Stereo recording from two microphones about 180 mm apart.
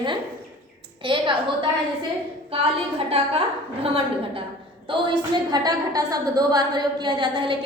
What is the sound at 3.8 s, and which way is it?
A woman's voice, 30° right (ahead or behind).